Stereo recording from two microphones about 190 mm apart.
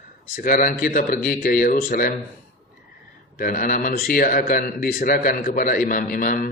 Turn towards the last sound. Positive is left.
turn(degrees=45)  # may be behind; listen again after turning